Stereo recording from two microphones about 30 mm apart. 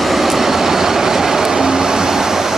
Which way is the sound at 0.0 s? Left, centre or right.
Centre.